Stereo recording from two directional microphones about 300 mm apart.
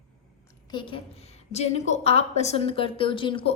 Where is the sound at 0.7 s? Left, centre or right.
Centre.